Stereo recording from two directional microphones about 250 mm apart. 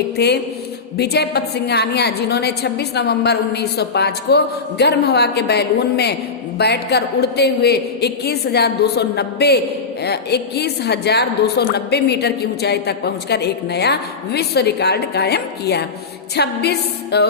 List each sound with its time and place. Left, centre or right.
0.2 s a woman's voice: left